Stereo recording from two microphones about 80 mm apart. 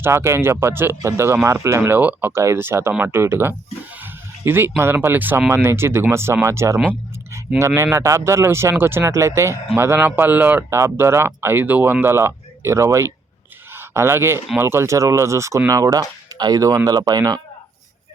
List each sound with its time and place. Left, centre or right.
0.0 s speech: right
2.0 s speech: right
2.3 s speech: right
3.9 s a sound: right
4.8 s speech: right
10.7 s speech: right